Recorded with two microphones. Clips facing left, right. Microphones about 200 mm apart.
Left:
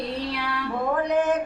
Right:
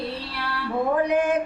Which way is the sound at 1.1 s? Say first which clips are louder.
Even; 10° right (ahead or behind).